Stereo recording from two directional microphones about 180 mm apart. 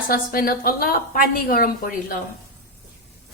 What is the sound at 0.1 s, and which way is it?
A woman's voice, 55° left (ahead or behind).